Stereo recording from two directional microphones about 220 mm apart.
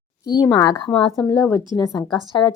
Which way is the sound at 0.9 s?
5° left (ahead or behind).